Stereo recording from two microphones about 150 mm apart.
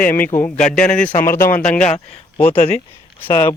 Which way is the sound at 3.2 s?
15° left (ahead or behind).